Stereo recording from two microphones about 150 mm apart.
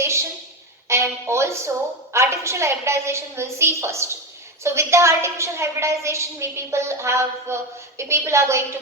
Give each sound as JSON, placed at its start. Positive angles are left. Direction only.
{"t": 0.9, "sound": "a woman's voice", "side_deg": -15}